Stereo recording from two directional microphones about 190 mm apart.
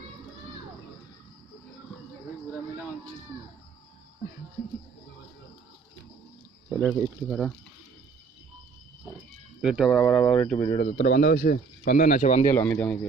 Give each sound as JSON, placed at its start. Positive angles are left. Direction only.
{"t": 6.7, "sound": "speech", "side_deg": 0}
{"t": 9.6, "sound": "speech", "side_deg": -5}
{"t": 10.8, "sound": "speech", "side_deg": 45}
{"t": 12.5, "sound": "speech", "side_deg": 10}